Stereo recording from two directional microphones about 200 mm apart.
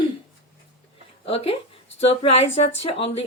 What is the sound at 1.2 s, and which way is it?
A woman's voice, 30° left (ahead or behind).